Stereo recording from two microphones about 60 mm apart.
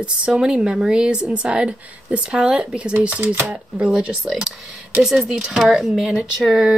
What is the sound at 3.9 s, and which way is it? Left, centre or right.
Speech, centre.